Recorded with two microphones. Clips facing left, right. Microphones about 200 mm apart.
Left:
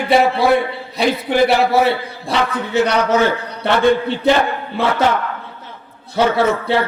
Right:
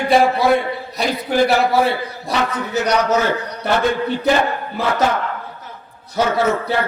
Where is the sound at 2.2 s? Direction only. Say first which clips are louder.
Left 2 dB; 30° left (ahead or behind).